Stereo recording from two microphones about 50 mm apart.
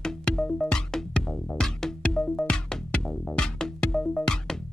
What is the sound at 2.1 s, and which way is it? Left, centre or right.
Music, centre.